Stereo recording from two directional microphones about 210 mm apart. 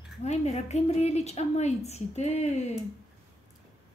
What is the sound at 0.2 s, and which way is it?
A woman's voice, 30° left (ahead or behind).